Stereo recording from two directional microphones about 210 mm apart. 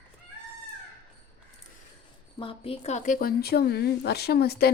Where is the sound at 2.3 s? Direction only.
25° left (ahead or behind).